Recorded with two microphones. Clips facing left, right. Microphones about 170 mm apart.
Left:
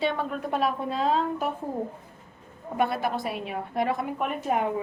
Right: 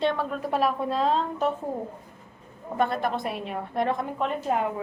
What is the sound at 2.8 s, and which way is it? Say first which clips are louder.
A woman's voice: right 1 dB; 5° left (ahead or behind).